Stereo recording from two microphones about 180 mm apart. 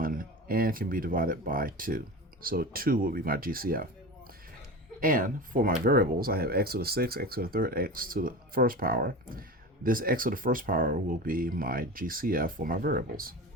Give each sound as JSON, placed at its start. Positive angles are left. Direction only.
{"t": 0.0, "sound": "speech", "side_deg": -50}
{"t": 4.9, "sound": "speech", "side_deg": -50}